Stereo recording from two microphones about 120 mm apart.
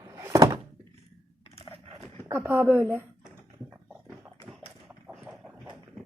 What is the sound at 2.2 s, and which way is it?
Speech, 20° right (ahead or behind).